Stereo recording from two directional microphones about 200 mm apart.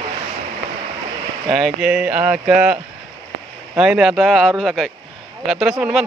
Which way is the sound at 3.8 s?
5° right (ahead or behind).